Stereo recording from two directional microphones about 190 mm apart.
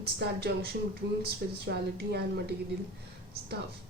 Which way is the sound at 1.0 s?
60° right (ahead or behind).